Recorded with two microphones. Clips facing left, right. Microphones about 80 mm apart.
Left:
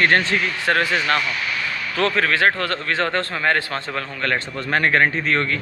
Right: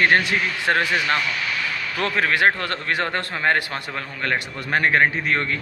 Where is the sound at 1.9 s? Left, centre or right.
Centre.